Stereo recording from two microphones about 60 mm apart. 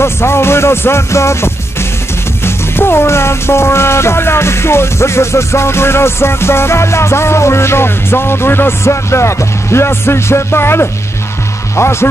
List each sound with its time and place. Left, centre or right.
0.0 s music: left
2.4 s speech: left